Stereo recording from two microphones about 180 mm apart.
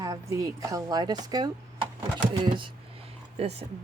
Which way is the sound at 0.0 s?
20° right (ahead or behind).